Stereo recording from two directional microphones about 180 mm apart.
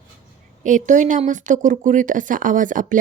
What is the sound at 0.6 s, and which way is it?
A woman's voice, 45° right (ahead or behind).